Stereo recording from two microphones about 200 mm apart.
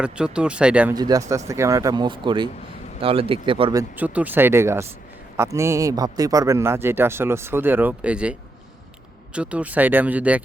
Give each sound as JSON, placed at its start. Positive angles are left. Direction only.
{"t": 0.0, "sound": "speech", "side_deg": -5}
{"t": 0.9, "sound": "speech", "side_deg": -20}